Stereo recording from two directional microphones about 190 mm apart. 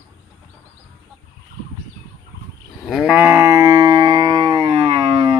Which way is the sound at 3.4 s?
15° right (ahead or behind).